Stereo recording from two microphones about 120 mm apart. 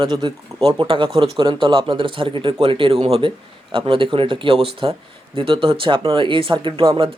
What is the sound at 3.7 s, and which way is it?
Speech, 45° right (ahead or behind).